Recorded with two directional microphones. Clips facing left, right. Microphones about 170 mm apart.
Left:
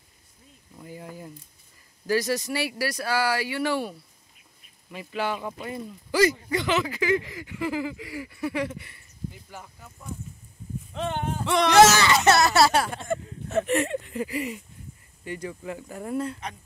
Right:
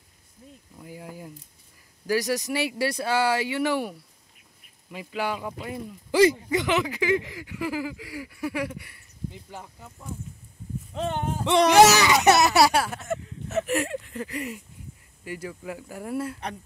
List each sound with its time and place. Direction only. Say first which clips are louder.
0.7 s speech: left 1 dB; 10° right (ahead or behind)
6.1 s speech: right 3 dB; 20° right (ahead or behind)
9.3 s speech: right 2 dB; 20° right (ahead or behind)
11.0 s speech: right 1 dB; 40° right (ahead or behind)
11.7 s speech: left 1 dB; 15° right (ahead or behind)